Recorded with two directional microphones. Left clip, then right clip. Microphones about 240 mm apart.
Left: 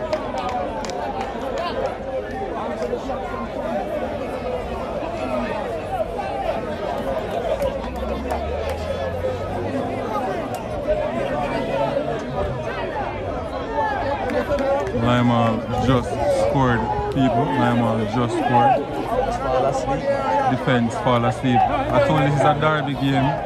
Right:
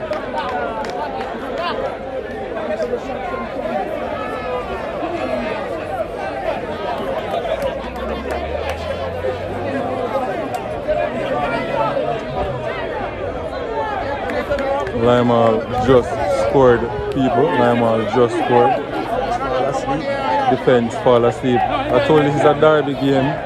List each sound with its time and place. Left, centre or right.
15.0 s a man's voice: centre
19.5 s chatter: left
19.9 s a sound: centre
20.6 s speech: centre